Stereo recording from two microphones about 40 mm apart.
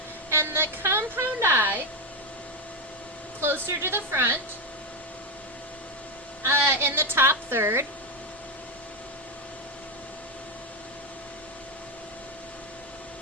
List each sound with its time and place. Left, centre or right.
0.3 s a woman's voice: right
3.4 s a woman's voice: right
6.4 s a woman's voice: right